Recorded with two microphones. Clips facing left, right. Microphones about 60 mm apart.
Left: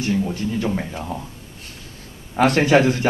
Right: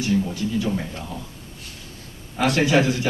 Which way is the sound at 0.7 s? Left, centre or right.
Centre.